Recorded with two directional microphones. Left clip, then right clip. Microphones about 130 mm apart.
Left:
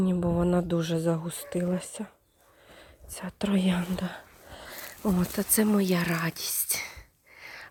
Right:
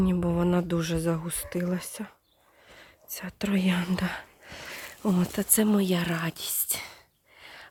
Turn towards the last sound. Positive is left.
turn(degrees=0)  # may be behind; listen again after turning